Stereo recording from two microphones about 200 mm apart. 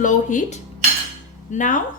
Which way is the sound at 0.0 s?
40° left (ahead or behind).